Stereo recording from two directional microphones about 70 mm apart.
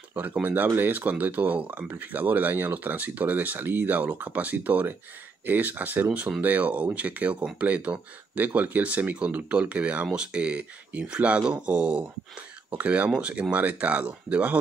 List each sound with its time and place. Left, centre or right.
0.1 s speech: right